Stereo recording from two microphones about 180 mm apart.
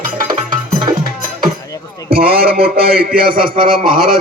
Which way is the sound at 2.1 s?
55° right (ahead or behind).